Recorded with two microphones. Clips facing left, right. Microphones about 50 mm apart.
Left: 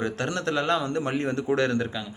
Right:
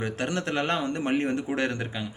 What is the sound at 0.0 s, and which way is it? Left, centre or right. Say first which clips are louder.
Speech: left 2 dB; right.